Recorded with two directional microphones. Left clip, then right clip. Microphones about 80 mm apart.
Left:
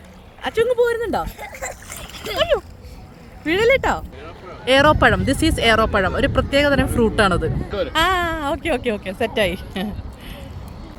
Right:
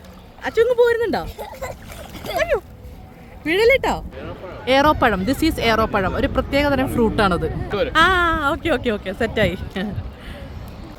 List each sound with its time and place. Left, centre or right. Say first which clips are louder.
0.4 s speech: right 1 dB; centre
0.8 s speech: right 2 dB; right
2.3 s speech: left 1 dB; centre
3.4 s speech: right 1 dB; centre
4.6 s speech: left 2 dB; centre
7.7 s speech: right 3 dB; centre